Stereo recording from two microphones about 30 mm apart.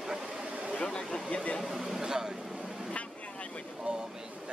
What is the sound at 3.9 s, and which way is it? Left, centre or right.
Speech, right.